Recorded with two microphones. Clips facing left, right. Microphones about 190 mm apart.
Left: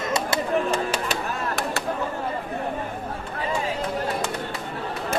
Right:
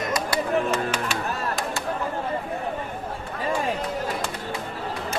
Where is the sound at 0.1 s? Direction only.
30° left (ahead or behind).